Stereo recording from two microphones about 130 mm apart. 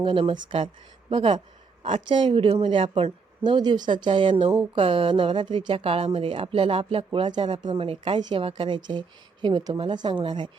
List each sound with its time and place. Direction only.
0.0 s speech: 45° right (ahead or behind)